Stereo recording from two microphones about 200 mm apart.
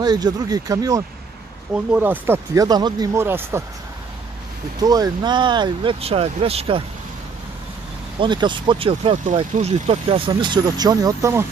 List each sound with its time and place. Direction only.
0.0 s speech: 20° right (ahead or behind)
4.7 s speech: 20° right (ahead or behind)
8.2 s speech: 25° right (ahead or behind)